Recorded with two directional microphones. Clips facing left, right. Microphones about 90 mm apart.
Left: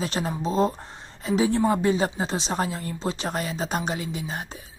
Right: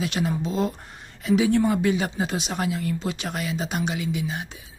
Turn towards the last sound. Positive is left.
turn(degrees=35)  # may be behind; listen again after turning